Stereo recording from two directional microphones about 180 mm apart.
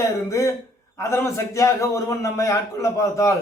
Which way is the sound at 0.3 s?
15° left (ahead or behind).